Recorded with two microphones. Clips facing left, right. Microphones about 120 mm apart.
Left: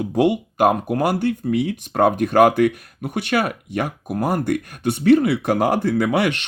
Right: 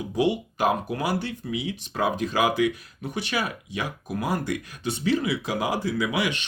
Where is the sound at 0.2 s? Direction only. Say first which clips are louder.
Left 6 dB; 55° left (ahead or behind).